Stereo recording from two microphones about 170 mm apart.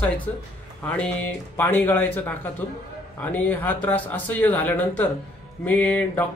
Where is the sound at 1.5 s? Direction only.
10° left (ahead or behind).